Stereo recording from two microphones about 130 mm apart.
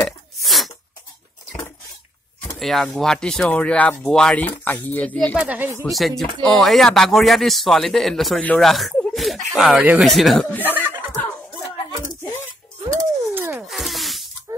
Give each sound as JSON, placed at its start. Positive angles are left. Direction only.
{"t": 0.4, "sound": "sneeze", "side_deg": 0}
{"t": 2.6, "sound": "speech", "side_deg": 0}
{"t": 5.4, "sound": "speech", "side_deg": -10}
{"t": 5.9, "sound": "speech", "side_deg": 0}
{"t": 8.9, "sound": "a sound", "side_deg": 5}
{"t": 9.5, "sound": "speech", "side_deg": -5}
{"t": 10.6, "sound": "snicker", "side_deg": -15}
{"t": 13.3, "sound": "rub", "side_deg": -15}
{"t": 13.7, "sound": "snake", "side_deg": 0}